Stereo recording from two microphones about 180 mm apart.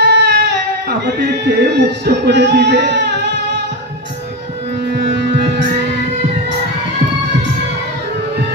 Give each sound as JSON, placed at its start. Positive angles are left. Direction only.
{"t": 0.0, "sound": "a sound", "side_deg": -70}
{"t": 0.8, "sound": "speech", "side_deg": -65}
{"t": 4.9, "sound": "music", "side_deg": -70}